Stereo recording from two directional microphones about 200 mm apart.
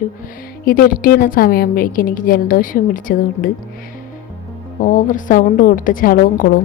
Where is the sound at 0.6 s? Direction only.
45° left (ahead or behind).